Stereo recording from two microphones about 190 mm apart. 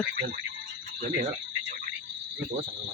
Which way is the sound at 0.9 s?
40° right (ahead or behind).